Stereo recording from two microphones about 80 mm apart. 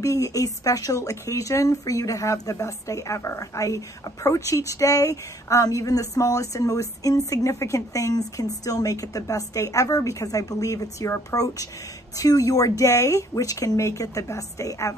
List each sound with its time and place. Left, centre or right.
0.0 s speech: left